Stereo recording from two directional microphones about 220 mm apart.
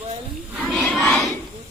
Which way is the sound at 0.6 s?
Centre (ahead or behind).